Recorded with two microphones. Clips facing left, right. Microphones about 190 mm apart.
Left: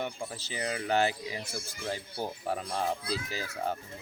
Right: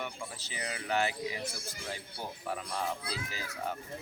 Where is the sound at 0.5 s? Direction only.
35° left (ahead or behind).